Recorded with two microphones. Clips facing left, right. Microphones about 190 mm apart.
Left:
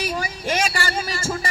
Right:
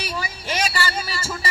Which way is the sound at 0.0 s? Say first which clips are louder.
Left 4 dB; 45° left (ahead or behind).